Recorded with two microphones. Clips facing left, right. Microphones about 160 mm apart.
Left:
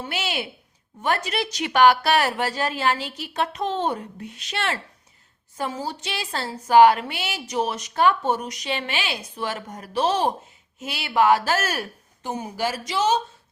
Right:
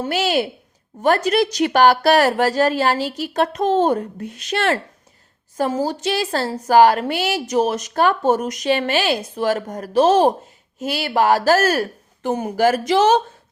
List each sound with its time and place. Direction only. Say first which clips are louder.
0.0 s a woman's voice: right 9 dB; 40° right (ahead or behind)
12.2 s speech: right 9 dB; 55° right (ahead or behind)